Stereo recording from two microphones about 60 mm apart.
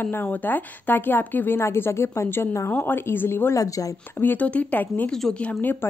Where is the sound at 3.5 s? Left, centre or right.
Left.